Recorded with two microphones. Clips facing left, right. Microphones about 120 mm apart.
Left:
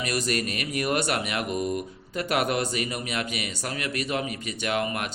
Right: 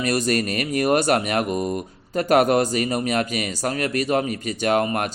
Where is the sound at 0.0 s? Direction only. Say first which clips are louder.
Right 6 dB; 40° right (ahead or behind).